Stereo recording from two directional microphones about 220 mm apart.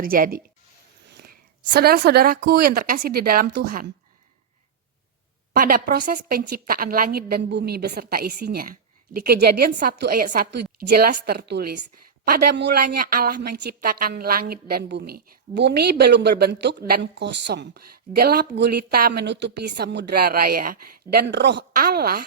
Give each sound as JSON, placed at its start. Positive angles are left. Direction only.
{"t": 0.0, "sound": "speech", "side_deg": -40}
{"t": 5.5, "sound": "a woman's voice", "side_deg": -40}